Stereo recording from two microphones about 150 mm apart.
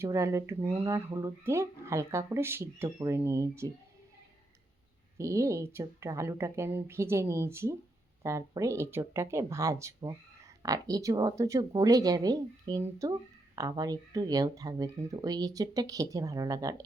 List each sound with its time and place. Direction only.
0.0 s speech: 20° right (ahead or behind)
5.1 s speech: 20° right (ahead or behind)